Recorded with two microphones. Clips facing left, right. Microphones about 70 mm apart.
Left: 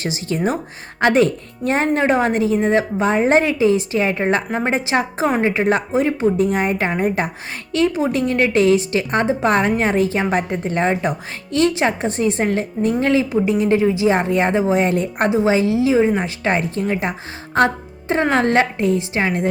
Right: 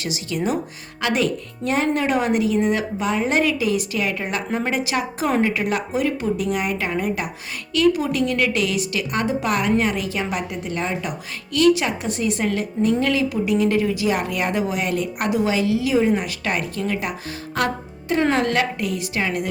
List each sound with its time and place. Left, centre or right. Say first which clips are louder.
0.0 s a woman's voice: left 3 dB; left